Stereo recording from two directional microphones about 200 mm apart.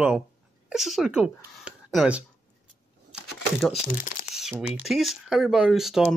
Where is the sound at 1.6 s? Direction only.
5° right (ahead or behind).